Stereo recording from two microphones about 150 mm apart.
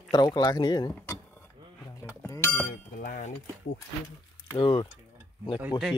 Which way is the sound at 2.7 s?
70° left (ahead or behind).